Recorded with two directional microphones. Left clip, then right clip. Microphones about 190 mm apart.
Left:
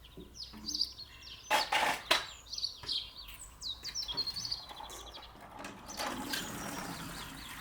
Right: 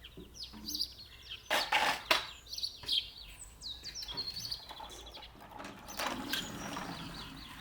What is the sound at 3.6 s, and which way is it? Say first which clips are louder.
Bird: left 4 dB; 10° left (ahead or behind).